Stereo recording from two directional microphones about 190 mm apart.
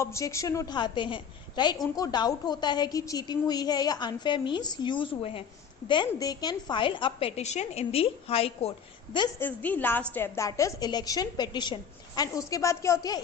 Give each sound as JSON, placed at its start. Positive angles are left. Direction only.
{"t": 0.0, "sound": "a woman's voice", "side_deg": 15}
{"t": 9.4, "sound": "a woman's voice", "side_deg": 10}